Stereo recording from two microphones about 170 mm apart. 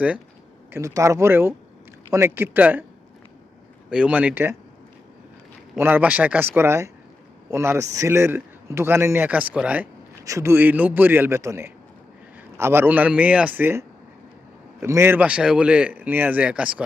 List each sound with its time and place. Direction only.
0.7 s a man's voice: 15° right (ahead or behind)
3.8 s a man's voice: 5° right (ahead or behind)
5.7 s a man's voice: 10° right (ahead or behind)